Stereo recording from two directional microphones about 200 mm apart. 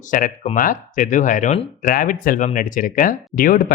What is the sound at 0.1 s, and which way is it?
Speech, 45° left (ahead or behind).